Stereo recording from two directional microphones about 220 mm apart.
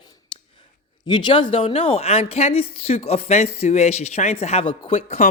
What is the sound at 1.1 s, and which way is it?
Speech, 20° left (ahead or behind).